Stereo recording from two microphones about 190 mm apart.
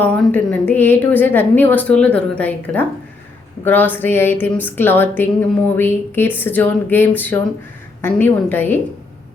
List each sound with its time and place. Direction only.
0.0 s a woman's voice: 10° left (ahead or behind)